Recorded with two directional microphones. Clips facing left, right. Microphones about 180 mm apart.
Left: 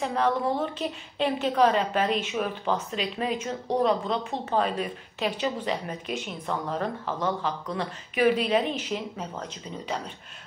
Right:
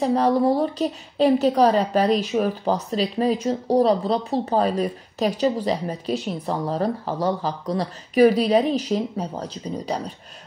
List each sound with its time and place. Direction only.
0.0 s a woman's voice: 35° right (ahead or behind)